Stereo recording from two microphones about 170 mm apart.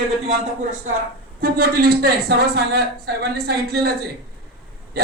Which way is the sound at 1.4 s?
60° right (ahead or behind).